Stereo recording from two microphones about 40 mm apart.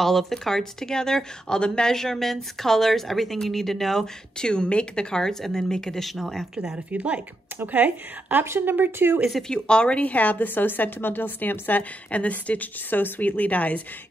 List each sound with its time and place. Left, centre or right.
0.0 s speech: centre
4.4 s speech: left
5.4 s speech: centre
6.0 s speech: centre
6.5 s speech: centre
6.9 s a woman's voice: right
8.5 s speech: right
9.5 s speech: left
10.4 s a woman's voice: left